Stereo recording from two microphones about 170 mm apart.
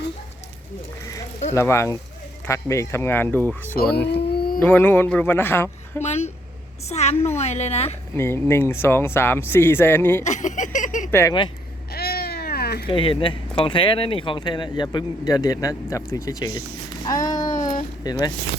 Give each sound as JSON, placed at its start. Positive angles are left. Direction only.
{"t": 1.5, "sound": "speech", "side_deg": 15}
{"t": 3.9, "sound": "a sound", "side_deg": 75}
{"t": 4.6, "sound": "speech", "side_deg": 10}
{"t": 6.0, "sound": "a woman's voice", "side_deg": 40}
{"t": 8.1, "sound": "speech", "side_deg": 15}
{"t": 10.2, "sound": "a sound", "side_deg": 45}
{"t": 11.1, "sound": "speech", "side_deg": 15}
{"t": 11.9, "sound": "cat", "side_deg": 65}
{"t": 12.9, "sound": "speech", "side_deg": 30}